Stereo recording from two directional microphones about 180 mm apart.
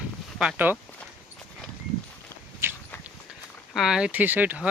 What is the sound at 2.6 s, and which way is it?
Walk, 15° right (ahead or behind).